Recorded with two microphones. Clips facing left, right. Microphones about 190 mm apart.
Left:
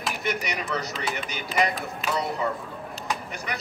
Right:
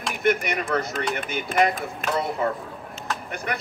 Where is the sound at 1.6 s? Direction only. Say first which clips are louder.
Right 4 dB; centre (ahead or behind).